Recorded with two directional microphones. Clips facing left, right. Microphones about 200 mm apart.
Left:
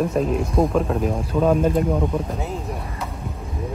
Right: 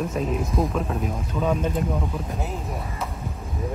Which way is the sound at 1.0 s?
45° left (ahead or behind).